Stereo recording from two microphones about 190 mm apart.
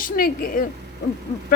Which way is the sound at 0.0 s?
45° left (ahead or behind).